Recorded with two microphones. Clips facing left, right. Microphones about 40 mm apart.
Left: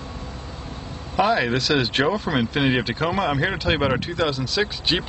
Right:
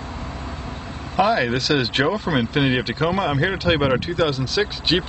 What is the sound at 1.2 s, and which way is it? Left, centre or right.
Speech, centre.